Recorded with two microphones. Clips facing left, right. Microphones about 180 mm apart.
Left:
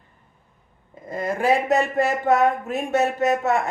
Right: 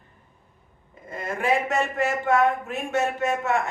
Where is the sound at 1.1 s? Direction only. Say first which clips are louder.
Left 4 dB; 35° left (ahead or behind).